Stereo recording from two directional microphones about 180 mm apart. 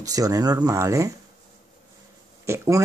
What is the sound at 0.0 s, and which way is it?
Speech, 20° right (ahead or behind).